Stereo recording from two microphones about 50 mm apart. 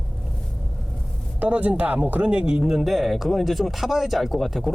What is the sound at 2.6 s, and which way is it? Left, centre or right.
Speech, centre.